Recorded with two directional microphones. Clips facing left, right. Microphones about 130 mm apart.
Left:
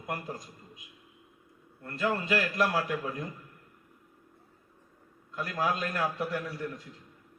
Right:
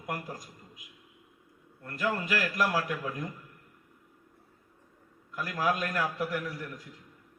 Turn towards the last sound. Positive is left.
turn(degrees=25)  # may be behind; listen again after turning